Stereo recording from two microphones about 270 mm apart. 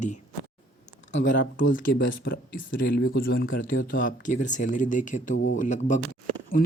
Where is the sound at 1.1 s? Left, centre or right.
Left.